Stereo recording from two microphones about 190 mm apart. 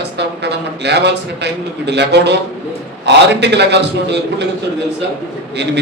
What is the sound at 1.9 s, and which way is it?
Speech, 65° right (ahead or behind).